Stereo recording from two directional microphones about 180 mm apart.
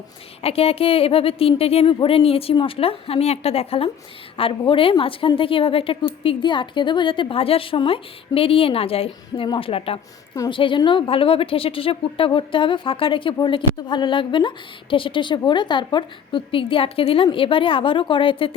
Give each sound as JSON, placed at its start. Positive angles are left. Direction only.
{"t": 0.4, "sound": "a woman's voice", "side_deg": 35}